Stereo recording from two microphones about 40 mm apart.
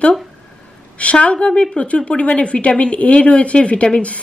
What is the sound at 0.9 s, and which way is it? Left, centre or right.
A woman's voice, left.